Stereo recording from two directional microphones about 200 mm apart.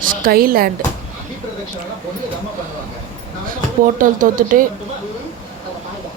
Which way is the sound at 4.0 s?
40° right (ahead or behind).